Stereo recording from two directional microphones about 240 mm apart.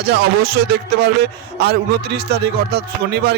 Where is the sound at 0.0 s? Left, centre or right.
Right.